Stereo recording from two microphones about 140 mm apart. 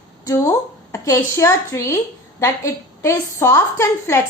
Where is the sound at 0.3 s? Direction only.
20° left (ahead or behind).